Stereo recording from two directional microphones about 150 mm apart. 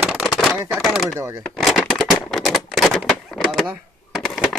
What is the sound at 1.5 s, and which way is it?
Typewriter, centre (ahead or behind).